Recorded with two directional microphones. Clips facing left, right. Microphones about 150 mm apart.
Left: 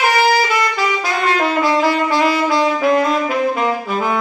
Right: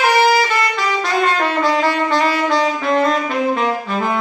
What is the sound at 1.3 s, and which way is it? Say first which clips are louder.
Saxophone: left 1 dB; 5° left (ahead or behind).